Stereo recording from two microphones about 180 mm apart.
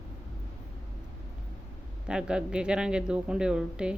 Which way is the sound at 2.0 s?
5° right (ahead or behind).